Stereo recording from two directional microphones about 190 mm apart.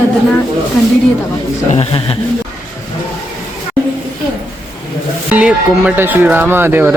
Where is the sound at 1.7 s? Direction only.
30° left (ahead or behind).